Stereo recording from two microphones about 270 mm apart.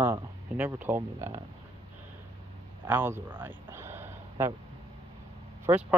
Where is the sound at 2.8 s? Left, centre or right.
Centre.